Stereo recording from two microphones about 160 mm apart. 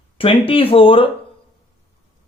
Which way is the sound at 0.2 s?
35° left (ahead or behind).